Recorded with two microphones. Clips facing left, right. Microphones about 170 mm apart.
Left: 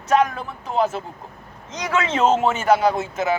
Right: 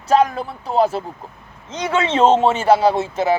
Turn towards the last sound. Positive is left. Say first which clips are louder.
# right 4 dB
turn(degrees=-30)  # may be behind; listen again after turning